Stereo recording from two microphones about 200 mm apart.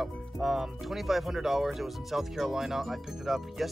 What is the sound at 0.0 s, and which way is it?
Speech, centre (ahead or behind).